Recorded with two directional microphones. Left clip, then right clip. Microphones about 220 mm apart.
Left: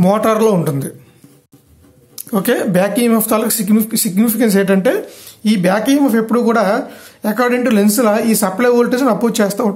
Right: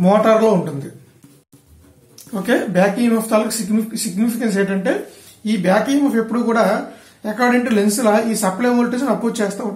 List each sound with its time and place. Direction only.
0.0 s speech: 45° left (ahead or behind)
2.4 s speech: 45° left (ahead or behind)